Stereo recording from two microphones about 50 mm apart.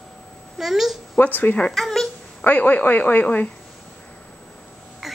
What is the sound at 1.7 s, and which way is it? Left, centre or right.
Speech, centre.